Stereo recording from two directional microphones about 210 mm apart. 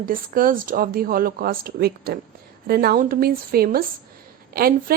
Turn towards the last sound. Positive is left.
turn(degrees=-45)  # may be behind; listen again after turning